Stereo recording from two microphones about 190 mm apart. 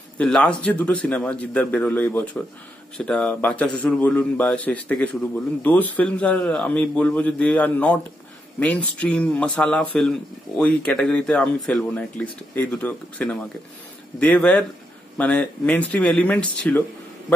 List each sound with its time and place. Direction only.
0.2 s speech: 5° left (ahead or behind)